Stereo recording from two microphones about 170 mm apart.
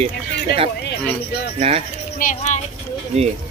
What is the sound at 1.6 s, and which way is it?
Speech, 40° right (ahead or behind).